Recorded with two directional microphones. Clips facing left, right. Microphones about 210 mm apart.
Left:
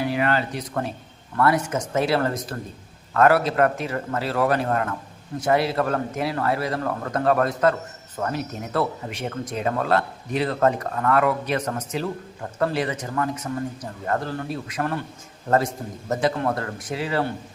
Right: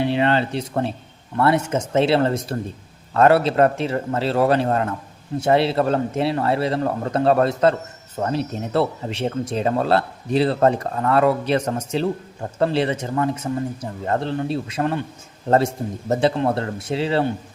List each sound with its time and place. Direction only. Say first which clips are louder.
0.0 s a man's voice: right 4 dB; 25° right (ahead or behind)